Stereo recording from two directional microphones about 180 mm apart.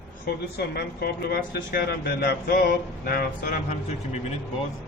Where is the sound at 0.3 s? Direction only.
60° left (ahead or behind).